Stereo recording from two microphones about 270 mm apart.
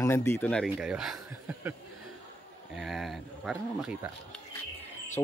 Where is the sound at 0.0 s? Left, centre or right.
Centre.